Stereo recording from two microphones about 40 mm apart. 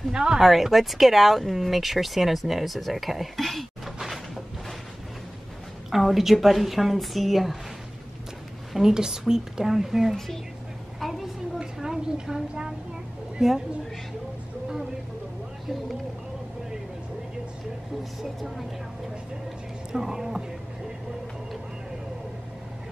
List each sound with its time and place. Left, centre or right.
0.2 s speech: centre
5.9 s speech: centre
8.7 s a woman's voice: centre
10.1 s speech: centre
11.0 s a sound: centre
11.6 s a sound: centre
13.4 s a woman's voice: centre
19.9 s a woman's voice: centre